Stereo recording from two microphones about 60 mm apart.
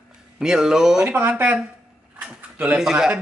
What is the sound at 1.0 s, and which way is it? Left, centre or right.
Speech, right.